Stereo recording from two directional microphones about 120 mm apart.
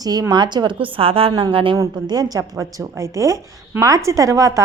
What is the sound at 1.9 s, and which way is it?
Speech, 35° right (ahead or behind).